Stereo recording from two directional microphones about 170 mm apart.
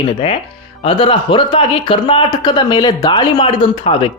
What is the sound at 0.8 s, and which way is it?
Speech, 30° left (ahead or behind).